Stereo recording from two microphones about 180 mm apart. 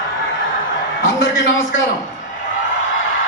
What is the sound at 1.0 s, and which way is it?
Speech, 90° left.